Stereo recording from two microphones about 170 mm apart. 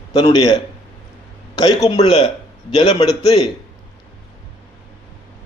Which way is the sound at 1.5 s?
25° left (ahead or behind).